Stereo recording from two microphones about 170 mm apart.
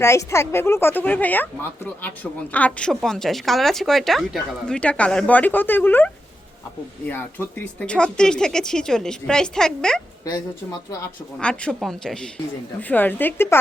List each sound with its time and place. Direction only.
0.0 s a woman's voice: 15° left (ahead or behind)
7.1 s speech: 10° left (ahead or behind)
10.2 s speech: 25° left (ahead or behind)
11.3 s a woman's voice: 5° left (ahead or behind)